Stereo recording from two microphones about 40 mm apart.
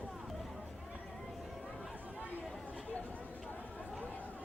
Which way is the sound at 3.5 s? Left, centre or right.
Left.